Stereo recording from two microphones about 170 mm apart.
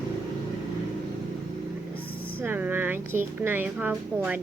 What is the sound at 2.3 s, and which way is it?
A woman's voice, 10° right (ahead or behind).